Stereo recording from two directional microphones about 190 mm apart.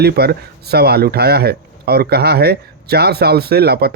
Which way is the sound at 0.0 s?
55° right (ahead or behind).